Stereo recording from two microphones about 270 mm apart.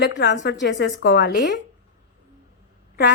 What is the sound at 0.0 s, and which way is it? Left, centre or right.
A woman's voice, left.